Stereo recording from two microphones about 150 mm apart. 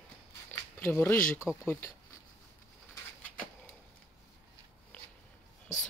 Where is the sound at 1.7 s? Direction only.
15° left (ahead or behind).